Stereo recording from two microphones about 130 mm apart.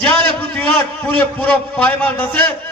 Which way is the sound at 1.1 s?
10° left (ahead or behind).